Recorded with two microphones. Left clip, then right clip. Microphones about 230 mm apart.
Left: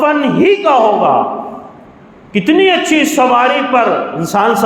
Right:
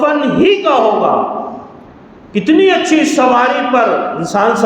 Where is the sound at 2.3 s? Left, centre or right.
Left.